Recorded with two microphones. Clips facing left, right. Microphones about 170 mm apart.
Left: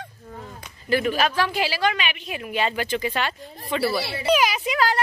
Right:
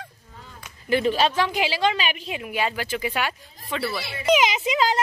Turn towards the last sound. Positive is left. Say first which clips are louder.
# right 1 dB
turn(degrees=-20)  # may be behind; listen again after turning